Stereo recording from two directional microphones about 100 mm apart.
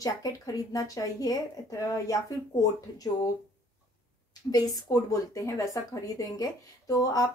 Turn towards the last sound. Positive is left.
turn(degrees=40)  # may be behind; listen again after turning